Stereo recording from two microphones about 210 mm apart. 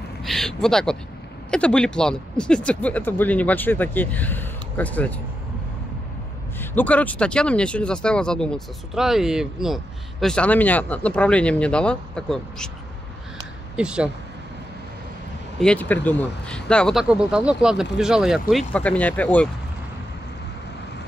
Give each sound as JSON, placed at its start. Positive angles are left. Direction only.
{"t": 0.2, "sound": "a sound", "side_deg": 0}
{"t": 1.5, "sound": "speech", "side_deg": 5}
{"t": 6.6, "sound": "speech", "side_deg": 10}
{"t": 13.7, "sound": "speech", "side_deg": -5}
{"t": 15.6, "sound": "speech", "side_deg": 5}